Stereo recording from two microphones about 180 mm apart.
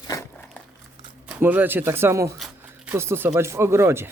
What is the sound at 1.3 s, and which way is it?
Speech, 10° right (ahead or behind).